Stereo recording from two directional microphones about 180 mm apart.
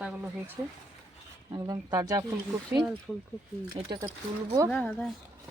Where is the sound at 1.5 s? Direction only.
20° right (ahead or behind).